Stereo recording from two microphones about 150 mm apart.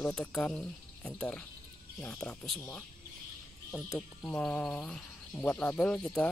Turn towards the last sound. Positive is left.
turn(degrees=5)  # may be behind; listen again after turning